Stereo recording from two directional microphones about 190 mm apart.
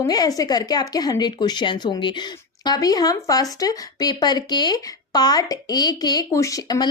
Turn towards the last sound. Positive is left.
turn(degrees=20)  # may be behind; listen again after turning